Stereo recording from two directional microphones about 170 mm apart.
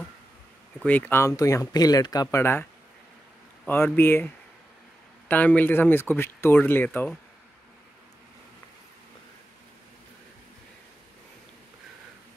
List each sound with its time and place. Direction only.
0.8 s speech: 10° left (ahead or behind)
5.3 s speech: 10° left (ahead or behind)